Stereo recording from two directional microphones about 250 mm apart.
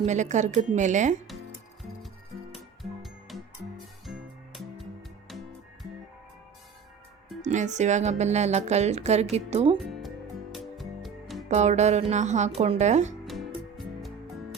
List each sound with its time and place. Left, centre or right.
0.0 s speech: right
3.0 s music: centre
7.4 s speech: right
10.5 s music: centre
11.4 s speech: right
13.2 s music: centre